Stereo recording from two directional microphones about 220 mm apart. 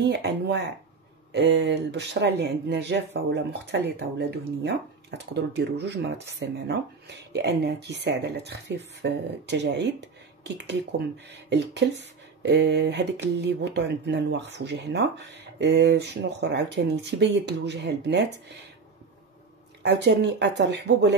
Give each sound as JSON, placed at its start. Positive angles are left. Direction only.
{"t": 0.0, "sound": "speech", "side_deg": -50}
{"t": 19.8, "sound": "speech", "side_deg": -50}